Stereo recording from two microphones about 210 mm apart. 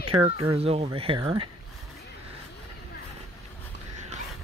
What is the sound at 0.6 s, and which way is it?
Speech, 30° right (ahead or behind).